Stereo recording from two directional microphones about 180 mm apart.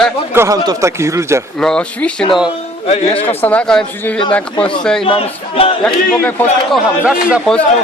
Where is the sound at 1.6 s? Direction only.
5° left (ahead or behind).